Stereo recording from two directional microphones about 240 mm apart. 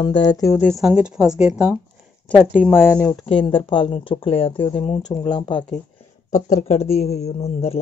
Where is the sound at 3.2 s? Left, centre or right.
Left.